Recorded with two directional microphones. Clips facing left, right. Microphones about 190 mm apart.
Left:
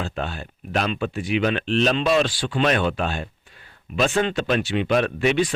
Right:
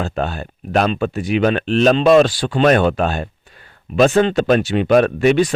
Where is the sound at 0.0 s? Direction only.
45° right (ahead or behind).